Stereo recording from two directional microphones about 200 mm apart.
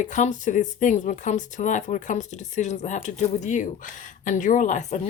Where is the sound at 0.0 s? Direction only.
35° left (ahead or behind).